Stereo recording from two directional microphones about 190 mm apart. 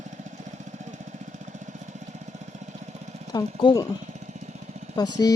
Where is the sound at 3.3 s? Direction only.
20° left (ahead or behind).